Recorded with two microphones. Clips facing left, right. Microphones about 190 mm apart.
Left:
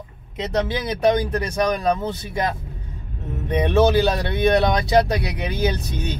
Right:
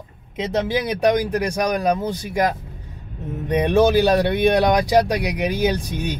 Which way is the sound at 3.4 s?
15° right (ahead or behind).